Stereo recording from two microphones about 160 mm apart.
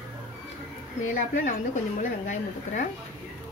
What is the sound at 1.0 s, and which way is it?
A woman's voice, 50° left (ahead or behind).